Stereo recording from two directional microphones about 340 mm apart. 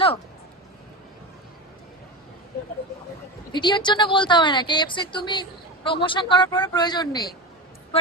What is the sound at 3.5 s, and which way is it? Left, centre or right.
A woman's voice, centre.